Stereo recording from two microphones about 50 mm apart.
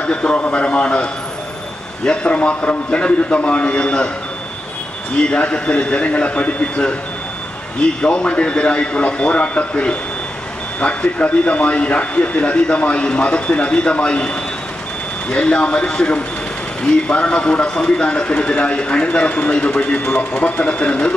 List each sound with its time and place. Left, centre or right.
0.0 s speech: left
5.1 s speech: centre
20.6 s speech: left